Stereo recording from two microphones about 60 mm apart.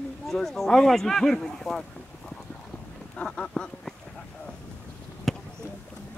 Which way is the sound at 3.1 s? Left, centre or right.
Centre.